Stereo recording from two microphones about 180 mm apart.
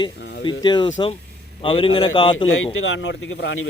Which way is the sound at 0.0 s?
25° left (ahead or behind).